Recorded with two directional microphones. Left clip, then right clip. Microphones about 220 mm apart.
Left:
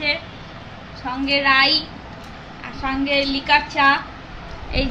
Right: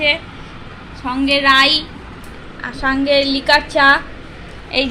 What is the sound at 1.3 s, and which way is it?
Speech, 20° right (ahead or behind).